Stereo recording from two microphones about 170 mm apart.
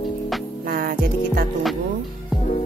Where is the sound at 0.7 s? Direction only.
55° right (ahead or behind).